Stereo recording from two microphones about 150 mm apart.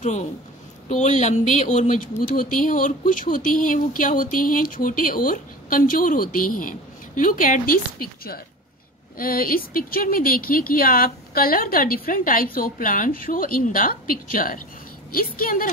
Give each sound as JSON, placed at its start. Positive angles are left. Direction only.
{"t": 0.0, "sound": "a woman's voice", "side_deg": 50}
{"t": 9.2, "sound": "speech", "side_deg": 70}